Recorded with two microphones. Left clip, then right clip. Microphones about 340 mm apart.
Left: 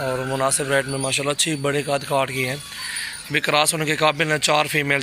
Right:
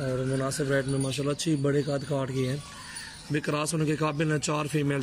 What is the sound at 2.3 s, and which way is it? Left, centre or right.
Speech, left.